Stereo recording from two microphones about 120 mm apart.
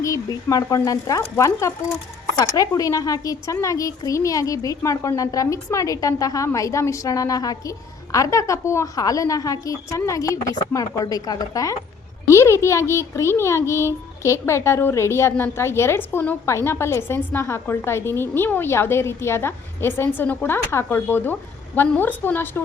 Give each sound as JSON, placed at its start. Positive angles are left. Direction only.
{"t": 0.0, "sound": "a child's voice", "side_deg": 25}